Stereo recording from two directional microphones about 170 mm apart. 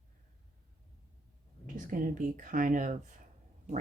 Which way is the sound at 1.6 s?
50° right (ahead or behind).